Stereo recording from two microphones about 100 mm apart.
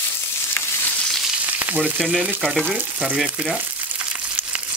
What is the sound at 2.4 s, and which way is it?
Frying, 5° left (ahead or behind).